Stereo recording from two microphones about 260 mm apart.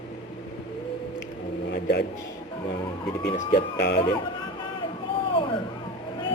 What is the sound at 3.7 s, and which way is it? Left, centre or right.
Speech, left.